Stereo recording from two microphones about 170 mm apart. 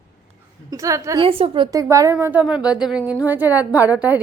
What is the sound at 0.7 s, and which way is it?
Speech, 20° right (ahead or behind).